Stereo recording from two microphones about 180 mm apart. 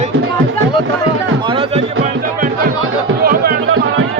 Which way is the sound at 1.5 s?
30° right (ahead or behind).